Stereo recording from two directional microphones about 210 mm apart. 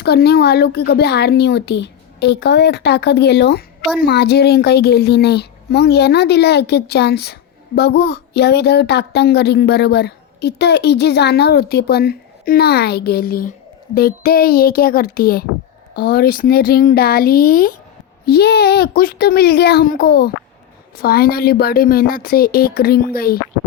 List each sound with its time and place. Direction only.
0.0 s speech: 50° left (ahead or behind)